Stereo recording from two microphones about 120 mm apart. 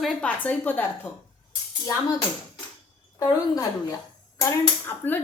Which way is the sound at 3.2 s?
25° left (ahead or behind).